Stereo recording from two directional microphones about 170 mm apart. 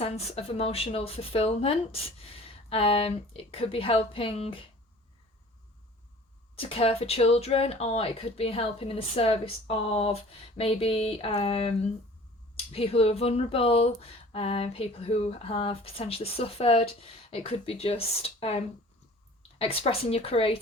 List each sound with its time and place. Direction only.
0.0 s speech: 35° left (ahead or behind)
6.6 s speech: 35° left (ahead or behind)